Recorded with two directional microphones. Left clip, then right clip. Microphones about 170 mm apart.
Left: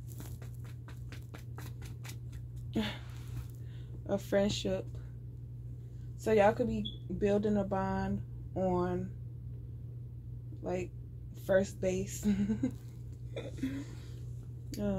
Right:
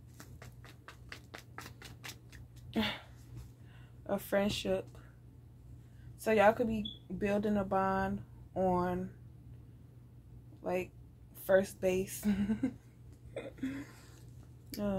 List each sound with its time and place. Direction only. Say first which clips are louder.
2.7 s speech: right 2 dB; 10° left (ahead or behind)
4.1 s speech: left 2 dB; 20° left (ahead or behind)
6.2 s speech: even; 20° left (ahead or behind)
10.6 s speech: right 1 dB; 20° left (ahead or behind)